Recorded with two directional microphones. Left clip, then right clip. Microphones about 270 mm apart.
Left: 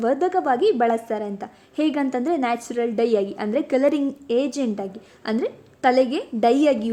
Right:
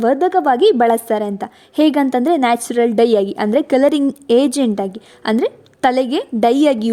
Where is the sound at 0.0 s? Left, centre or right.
Right.